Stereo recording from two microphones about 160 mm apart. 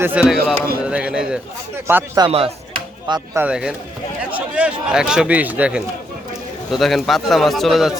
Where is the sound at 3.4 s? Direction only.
5° right (ahead or behind).